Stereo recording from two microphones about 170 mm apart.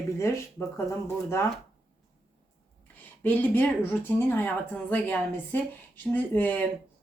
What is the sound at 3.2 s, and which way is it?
Speech, 10° left (ahead or behind).